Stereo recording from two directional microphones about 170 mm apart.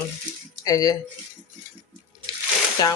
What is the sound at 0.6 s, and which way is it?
Speech, 20° left (ahead or behind).